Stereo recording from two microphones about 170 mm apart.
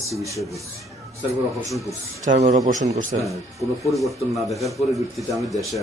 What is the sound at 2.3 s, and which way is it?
Speech, 55° right (ahead or behind).